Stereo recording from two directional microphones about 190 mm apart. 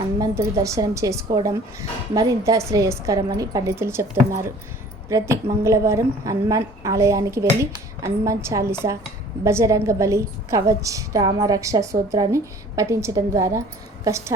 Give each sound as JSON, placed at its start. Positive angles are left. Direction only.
{"t": 0.2, "sound": "a woman's voice", "side_deg": -20}